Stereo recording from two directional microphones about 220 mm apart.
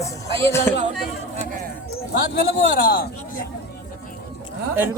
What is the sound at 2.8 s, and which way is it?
Speech, 40° left (ahead or behind).